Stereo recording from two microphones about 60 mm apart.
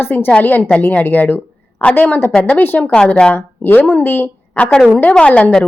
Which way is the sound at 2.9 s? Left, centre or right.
Centre.